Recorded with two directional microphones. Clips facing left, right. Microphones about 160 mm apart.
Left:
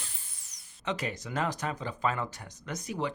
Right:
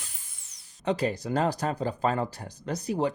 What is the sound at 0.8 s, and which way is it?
Speech, 35° right (ahead or behind).